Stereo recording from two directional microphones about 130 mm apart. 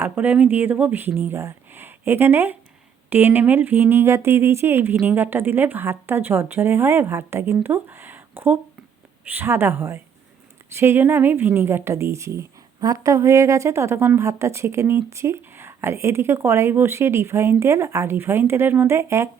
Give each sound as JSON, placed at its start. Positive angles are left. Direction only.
{"t": 0.0, "sound": "speech", "side_deg": -15}